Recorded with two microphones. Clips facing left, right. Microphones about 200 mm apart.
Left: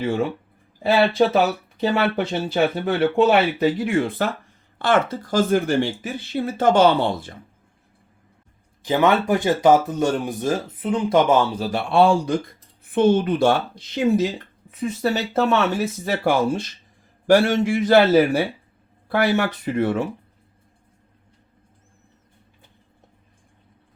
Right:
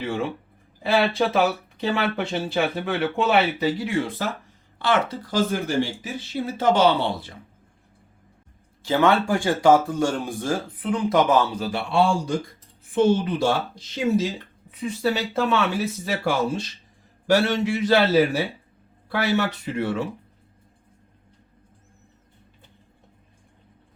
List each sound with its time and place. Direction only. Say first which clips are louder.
1.8 s speech: left 4 dB; 40° left (ahead or behind)
8.8 s speech: left 1 dB; 15° left (ahead or behind)
11.7 s speech: left 5 dB; 55° left (ahead or behind)
14.7 s speech: left 2 dB; 45° left (ahead or behind)